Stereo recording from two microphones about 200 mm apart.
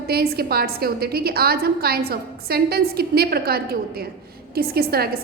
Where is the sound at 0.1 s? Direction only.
50° right (ahead or behind).